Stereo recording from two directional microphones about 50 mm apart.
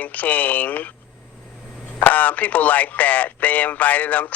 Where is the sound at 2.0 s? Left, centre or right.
Left.